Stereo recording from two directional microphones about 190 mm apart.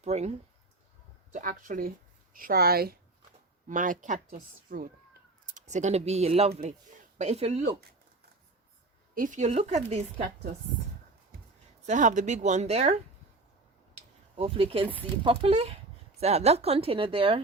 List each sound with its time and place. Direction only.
0.0 s speech: 35° right (ahead or behind)
9.1 s speech: 45° right (ahead or behind)
11.9 s speech: 40° right (ahead or behind)
13.9 s a sound: 30° right (ahead or behind)
15.2 s speech: 30° right (ahead or behind)